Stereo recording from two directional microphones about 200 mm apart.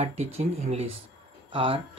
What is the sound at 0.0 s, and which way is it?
Speech, 35° right (ahead or behind).